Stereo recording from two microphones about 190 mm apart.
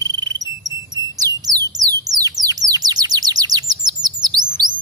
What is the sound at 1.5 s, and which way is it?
Bird, 20° right (ahead or behind).